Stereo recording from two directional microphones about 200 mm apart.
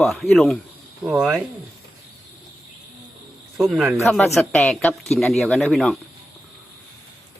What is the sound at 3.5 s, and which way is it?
Speech, centre (ahead or behind).